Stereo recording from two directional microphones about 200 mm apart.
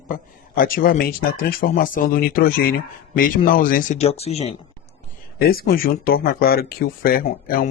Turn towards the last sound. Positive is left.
turn(degrees=45)  # may be behind; listen again after turning